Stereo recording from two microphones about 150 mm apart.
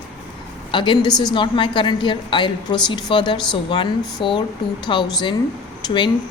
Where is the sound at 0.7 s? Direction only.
30° left (ahead or behind).